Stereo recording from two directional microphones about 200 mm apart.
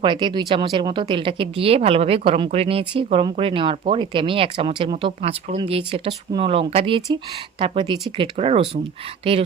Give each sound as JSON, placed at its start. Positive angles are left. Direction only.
{"t": 0.0, "sound": "speech", "side_deg": -25}